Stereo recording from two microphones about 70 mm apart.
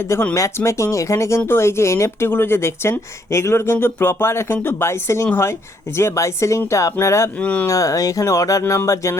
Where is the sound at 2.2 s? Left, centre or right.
Left.